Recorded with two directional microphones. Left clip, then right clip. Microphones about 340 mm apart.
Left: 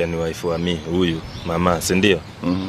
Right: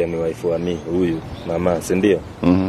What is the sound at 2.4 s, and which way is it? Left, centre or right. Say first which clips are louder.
Speech: right 11 dB; centre.